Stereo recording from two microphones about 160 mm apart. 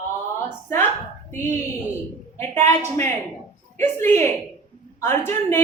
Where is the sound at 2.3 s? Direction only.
15° left (ahead or behind).